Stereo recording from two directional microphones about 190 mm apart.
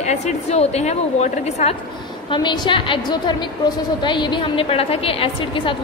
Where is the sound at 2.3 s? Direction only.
25° left (ahead or behind).